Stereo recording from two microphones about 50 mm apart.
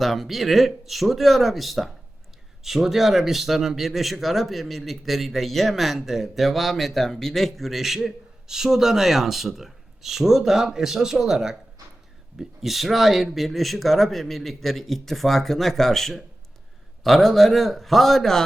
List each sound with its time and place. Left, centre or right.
0.0 s speech: centre